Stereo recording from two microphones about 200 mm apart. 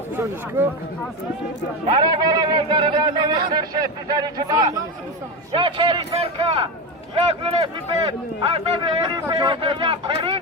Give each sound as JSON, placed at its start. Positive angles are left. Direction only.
{"t": 0.2, "sound": "speech", "side_deg": -10}
{"t": 1.9, "sound": "speech", "side_deg": -25}